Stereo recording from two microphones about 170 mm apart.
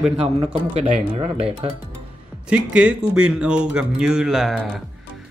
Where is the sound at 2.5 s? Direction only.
5° right (ahead or behind).